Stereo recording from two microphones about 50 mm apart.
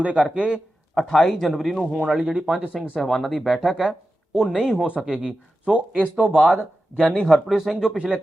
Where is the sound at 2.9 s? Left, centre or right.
Centre.